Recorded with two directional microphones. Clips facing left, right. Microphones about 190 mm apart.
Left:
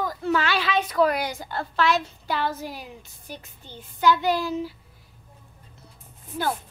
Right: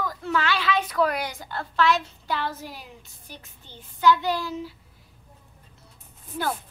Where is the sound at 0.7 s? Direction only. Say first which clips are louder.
Left 3 dB; 25° left (ahead or behind).